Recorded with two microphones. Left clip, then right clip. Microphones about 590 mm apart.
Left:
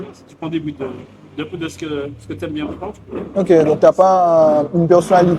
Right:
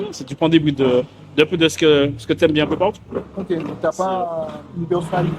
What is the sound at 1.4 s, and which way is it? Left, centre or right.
Speech, right.